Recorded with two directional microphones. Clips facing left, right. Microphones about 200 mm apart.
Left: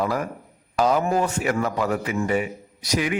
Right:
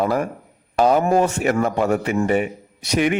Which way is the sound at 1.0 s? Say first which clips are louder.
Right 5 dB; 55° right (ahead or behind).